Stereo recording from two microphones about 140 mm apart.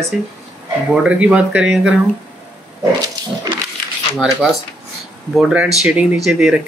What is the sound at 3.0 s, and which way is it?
Wild animals, 30° right (ahead or behind).